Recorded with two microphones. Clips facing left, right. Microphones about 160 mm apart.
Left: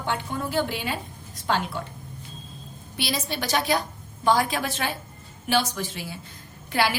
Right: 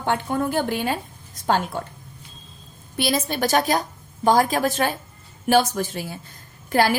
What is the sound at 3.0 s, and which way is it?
A woman's voice, 50° right (ahead or behind).